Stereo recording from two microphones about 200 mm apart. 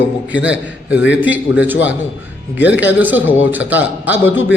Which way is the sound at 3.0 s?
10° right (ahead or behind).